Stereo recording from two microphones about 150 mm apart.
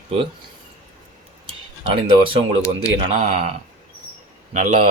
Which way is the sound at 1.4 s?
35° right (ahead or behind).